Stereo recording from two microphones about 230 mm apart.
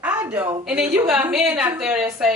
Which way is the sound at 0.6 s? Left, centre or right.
Centre.